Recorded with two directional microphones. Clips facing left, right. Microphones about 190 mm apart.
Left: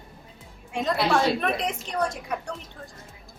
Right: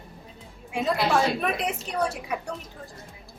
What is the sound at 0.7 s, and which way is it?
A woman's voice, 5° right (ahead or behind).